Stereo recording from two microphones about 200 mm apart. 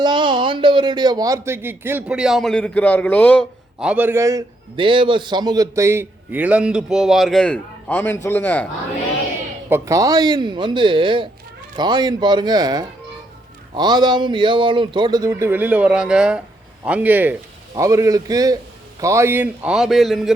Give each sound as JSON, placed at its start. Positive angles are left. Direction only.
{"t": 0.0, "sound": "a man's voice", "side_deg": -25}
{"t": 3.8, "sound": "a man's voice", "side_deg": -5}
{"t": 9.6, "sound": "a man's voice", "side_deg": -15}